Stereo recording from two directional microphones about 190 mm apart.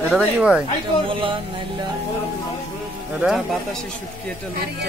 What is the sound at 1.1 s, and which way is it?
Music, 25° right (ahead or behind).